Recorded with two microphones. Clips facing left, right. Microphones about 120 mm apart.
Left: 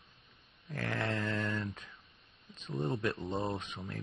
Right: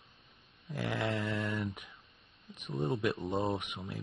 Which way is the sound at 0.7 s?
15° right (ahead or behind).